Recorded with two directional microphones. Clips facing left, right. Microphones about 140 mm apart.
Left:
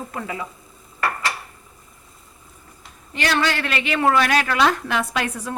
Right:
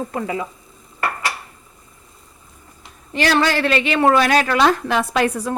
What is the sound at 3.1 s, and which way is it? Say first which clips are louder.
A woman's voice: right 4 dB; 35° right (ahead or behind).